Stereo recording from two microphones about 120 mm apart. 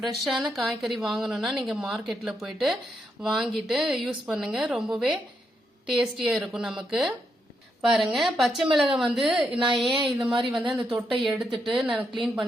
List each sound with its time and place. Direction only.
0.0 s a woman's voice: centre (ahead or behind)
9.6 s speech: 40° right (ahead or behind)
10.1 s a woman's voice: centre (ahead or behind)